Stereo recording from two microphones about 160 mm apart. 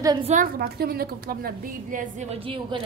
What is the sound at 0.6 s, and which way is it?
A woman's voice, 75° right (ahead or behind).